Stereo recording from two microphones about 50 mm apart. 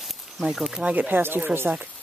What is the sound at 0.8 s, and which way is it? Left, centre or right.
Speech, right.